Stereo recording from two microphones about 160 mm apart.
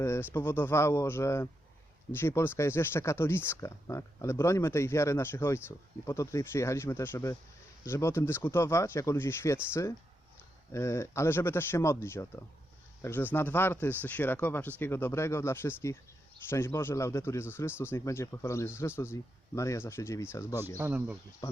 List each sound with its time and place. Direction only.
0.0 s speech: 15° left (ahead or behind)
10.7 s speech: 15° left (ahead or behind)
20.7 s speech: 10° right (ahead or behind)
21.4 s speech: 25° left (ahead or behind)